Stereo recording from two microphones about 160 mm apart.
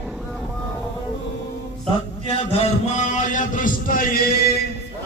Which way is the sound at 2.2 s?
35° left (ahead or behind).